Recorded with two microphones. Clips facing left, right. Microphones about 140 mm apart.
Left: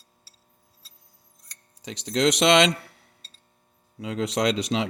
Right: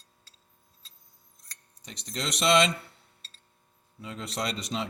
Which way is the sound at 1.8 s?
90° left.